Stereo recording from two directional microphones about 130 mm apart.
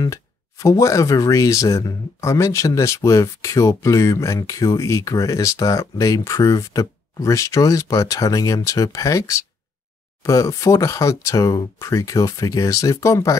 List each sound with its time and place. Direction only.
0.0 s speech: 25° left (ahead or behind)